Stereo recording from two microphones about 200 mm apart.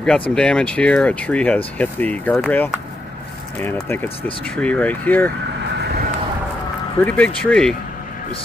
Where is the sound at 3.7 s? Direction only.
10° left (ahead or behind).